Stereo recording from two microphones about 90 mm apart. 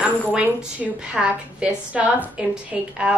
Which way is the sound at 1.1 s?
10° right (ahead or behind).